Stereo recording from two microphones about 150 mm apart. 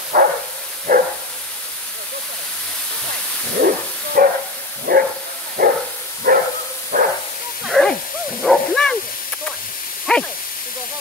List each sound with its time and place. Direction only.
0.1 s bow-wow: 75° right (ahead or behind)
0.9 s dog: 70° right (ahead or behind)
3.6 s bow-wow: 75° right (ahead or behind)
4.9 s dog: 90° right
5.6 s bow-wow: 85° right
6.3 s bow-wow: 75° right (ahead or behind)
7.6 s a sound: centre (ahead or behind)
8.4 s bow-wow: 5° left (ahead or behind)
10.1 s dog: 5° left (ahead or behind)